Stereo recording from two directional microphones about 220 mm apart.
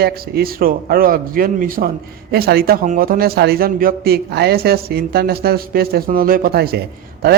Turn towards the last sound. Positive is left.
turn(degrees=-45)  # may be behind; listen again after turning